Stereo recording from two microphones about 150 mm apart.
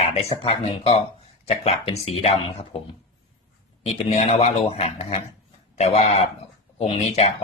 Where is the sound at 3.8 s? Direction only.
45° left (ahead or behind).